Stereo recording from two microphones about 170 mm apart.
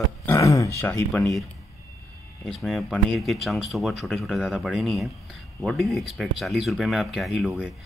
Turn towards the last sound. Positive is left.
turn(degrees=0)  # may be behind; listen again after turning